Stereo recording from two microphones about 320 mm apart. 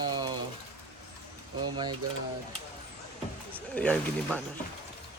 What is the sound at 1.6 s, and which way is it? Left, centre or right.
Speech, centre.